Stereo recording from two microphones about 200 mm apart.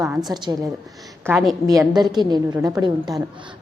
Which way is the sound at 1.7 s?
20° right (ahead or behind).